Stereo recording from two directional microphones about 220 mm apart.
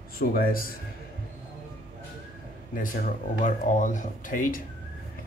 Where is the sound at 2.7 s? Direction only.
35° left (ahead or behind).